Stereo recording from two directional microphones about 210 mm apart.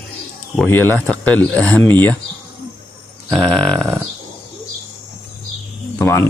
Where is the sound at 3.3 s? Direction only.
5° left (ahead or behind).